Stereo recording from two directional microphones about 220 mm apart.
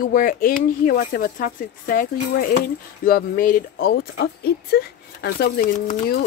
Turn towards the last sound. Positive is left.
turn(degrees=40)  # may be behind; listen again after turning